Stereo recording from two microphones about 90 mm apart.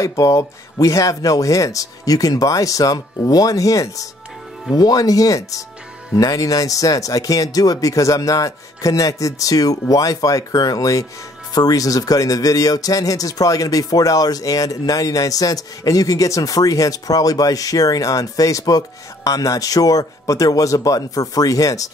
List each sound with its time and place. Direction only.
0.0 s speech: 40° left (ahead or behind)